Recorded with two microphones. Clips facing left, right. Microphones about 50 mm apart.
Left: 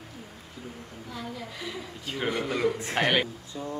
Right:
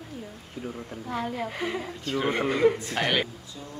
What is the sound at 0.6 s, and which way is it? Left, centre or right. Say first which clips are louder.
A woman's voice: right 7 dB; right.